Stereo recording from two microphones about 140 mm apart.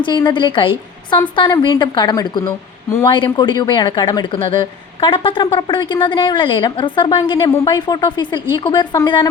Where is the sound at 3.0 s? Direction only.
35° left (ahead or behind).